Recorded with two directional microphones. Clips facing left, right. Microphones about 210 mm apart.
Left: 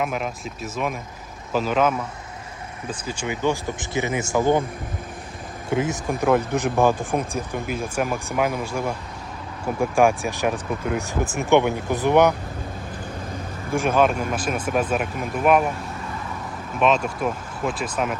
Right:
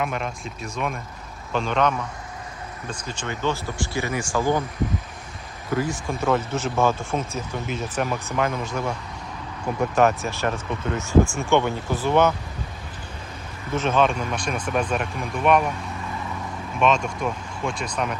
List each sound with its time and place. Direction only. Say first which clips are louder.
0.0 s speech: left 1 dB; 5° left (ahead or behind); by 4.6 s 20° left (ahead or behind)
5.6 s speech: left 2 dB; 20° left (ahead or behind)
13.7 s speech: left 2 dB; 10° left (ahead or behind)
16.8 s speech: left 1 dB; 5° left (ahead or behind)